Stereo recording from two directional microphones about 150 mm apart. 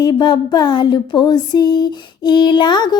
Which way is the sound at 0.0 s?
30° left (ahead or behind).